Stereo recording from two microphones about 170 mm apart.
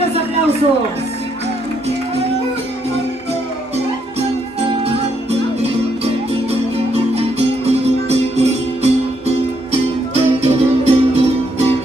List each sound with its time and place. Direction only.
6.9 s music: 40° right (ahead or behind)
10.1 s music: 40° right (ahead or behind)